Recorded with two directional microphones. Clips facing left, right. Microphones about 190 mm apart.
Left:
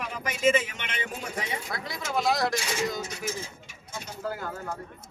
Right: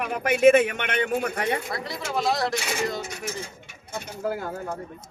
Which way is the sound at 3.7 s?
60° right (ahead or behind).